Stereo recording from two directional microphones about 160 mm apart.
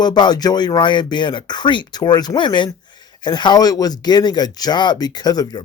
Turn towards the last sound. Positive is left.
turn(degrees=25)  # may be behind; listen again after turning